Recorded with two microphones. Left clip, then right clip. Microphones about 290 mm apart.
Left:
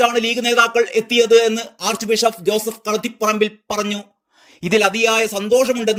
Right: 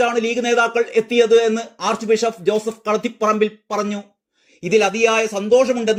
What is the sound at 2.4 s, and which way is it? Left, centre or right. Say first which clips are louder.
Speech: even; centre.